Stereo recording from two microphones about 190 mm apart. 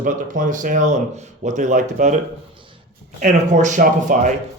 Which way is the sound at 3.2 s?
40° right (ahead or behind).